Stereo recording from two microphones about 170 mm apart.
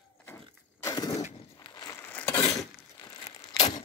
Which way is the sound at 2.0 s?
10° left (ahead or behind).